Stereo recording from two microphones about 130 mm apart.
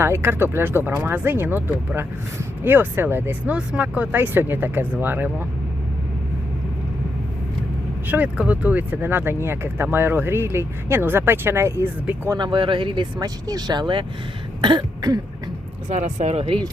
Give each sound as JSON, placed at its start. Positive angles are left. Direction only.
{"t": 0.0, "sound": "speech", "side_deg": -15}
{"t": 8.0, "sound": "speech", "side_deg": -10}
{"t": 12.3, "sound": "speech", "side_deg": -35}
{"t": 14.6, "sound": "cough", "side_deg": -35}
{"t": 15.9, "sound": "speech", "side_deg": -60}